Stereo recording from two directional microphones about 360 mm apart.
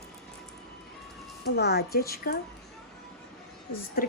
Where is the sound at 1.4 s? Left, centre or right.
Left.